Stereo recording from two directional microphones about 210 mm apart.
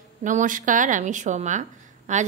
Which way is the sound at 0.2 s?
35° right (ahead or behind).